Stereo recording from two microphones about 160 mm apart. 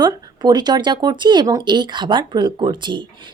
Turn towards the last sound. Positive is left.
turn(degrees=-30)  # may be behind; listen again after turning